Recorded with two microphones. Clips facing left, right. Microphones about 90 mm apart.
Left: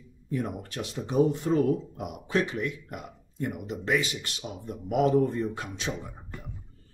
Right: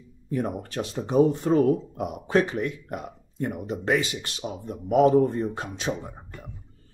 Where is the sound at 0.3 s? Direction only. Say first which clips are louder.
Right 4 dB; 40° right (ahead or behind).